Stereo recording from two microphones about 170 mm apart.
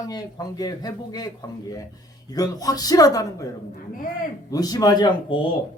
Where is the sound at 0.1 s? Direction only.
20° left (ahead or behind).